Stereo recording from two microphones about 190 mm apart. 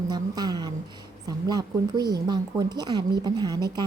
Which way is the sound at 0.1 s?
20° right (ahead or behind).